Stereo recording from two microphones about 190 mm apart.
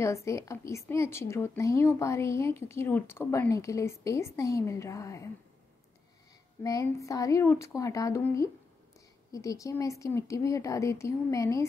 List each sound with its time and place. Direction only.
0.0 s speech: 15° left (ahead or behind)
6.6 s speech: 15° left (ahead or behind)